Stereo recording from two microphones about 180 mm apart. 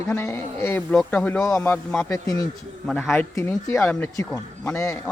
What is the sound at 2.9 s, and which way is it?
Speech, centre (ahead or behind).